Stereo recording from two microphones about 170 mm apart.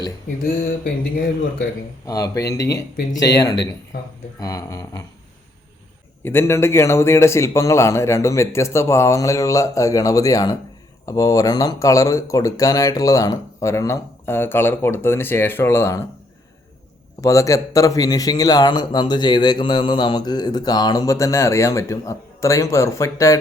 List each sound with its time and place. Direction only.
2.0 s speech: 20° left (ahead or behind)
6.2 s a man's voice: 15° left (ahead or behind)
17.2 s speech: 20° left (ahead or behind)